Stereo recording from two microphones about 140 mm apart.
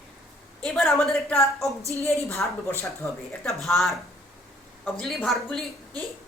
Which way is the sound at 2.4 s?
10° left (ahead or behind).